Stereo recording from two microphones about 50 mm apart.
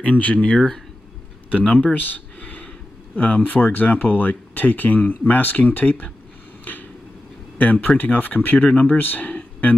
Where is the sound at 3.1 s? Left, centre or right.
Left.